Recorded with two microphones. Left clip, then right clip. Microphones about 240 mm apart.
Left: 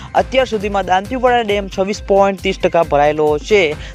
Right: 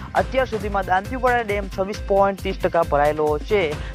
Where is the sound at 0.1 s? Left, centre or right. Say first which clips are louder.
Left 6 dB; left.